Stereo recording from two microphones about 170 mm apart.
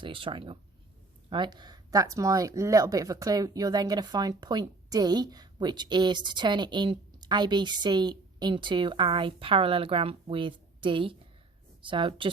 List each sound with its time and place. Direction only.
0.0 s speech: 30° right (ahead or behind)